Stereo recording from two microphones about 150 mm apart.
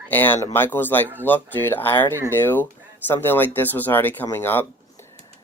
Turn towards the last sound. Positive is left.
turn(degrees=15)  # may be behind; listen again after turning